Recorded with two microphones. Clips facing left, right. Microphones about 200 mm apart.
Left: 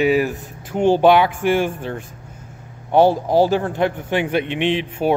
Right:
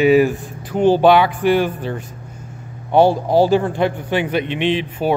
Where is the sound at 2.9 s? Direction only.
15° left (ahead or behind).